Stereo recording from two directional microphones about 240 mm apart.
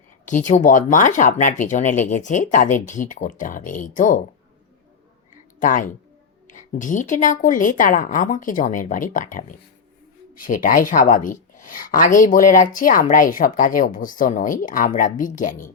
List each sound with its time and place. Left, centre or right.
0.3 s a woman's voice: left
5.5 s a woman's voice: left